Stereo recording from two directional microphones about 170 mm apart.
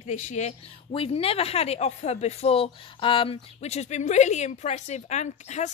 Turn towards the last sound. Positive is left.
turn(degrees=40)  # may be behind; listen again after turning